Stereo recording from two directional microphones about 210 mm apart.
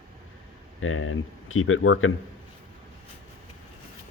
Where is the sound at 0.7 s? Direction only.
75° left (ahead or behind).